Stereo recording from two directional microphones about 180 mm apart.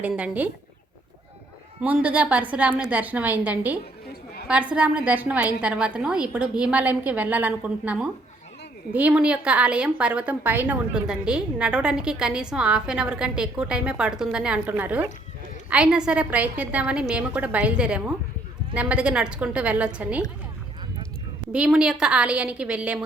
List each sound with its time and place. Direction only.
0.0 s a woman's voice: 10° right (ahead or behind)
1.8 s a woman's voice: 10° right (ahead or behind)
21.5 s a woman's voice: 5° right (ahead or behind)